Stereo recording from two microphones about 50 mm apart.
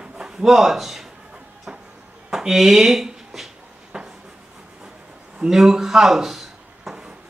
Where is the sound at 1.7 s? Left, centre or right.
Centre.